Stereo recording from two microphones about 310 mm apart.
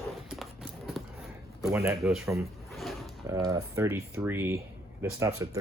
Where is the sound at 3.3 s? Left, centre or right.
Centre.